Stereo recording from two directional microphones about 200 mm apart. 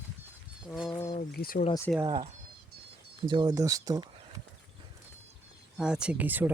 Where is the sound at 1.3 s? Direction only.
50° left (ahead or behind).